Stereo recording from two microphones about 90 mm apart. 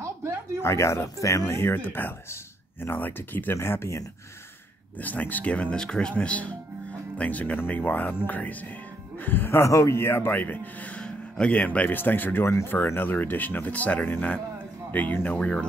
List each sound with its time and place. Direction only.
0.6 s speech: 30° left (ahead or behind)
5.0 s speech: 20° left (ahead or behind)